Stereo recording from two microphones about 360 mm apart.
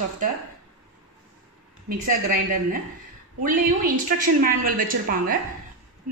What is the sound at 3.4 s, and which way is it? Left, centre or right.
A woman's voice, right.